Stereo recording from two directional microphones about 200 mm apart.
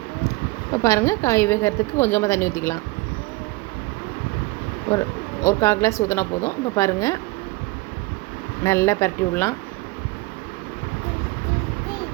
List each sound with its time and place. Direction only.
0.7 s speech: 15° left (ahead or behind)
4.9 s speech: 15° left (ahead or behind)
8.6 s speech: 15° left (ahead or behind)